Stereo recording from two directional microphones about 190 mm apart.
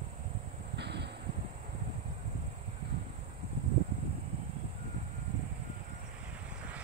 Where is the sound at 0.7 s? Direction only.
60° right (ahead or behind).